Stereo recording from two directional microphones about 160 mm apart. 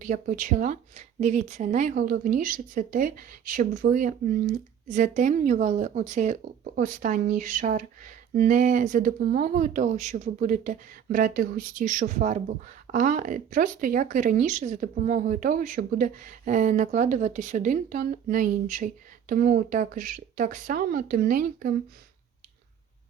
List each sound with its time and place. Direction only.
0.0 s speech: 55° right (ahead or behind)